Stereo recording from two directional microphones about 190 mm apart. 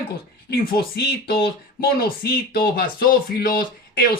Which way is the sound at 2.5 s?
55° left (ahead or behind).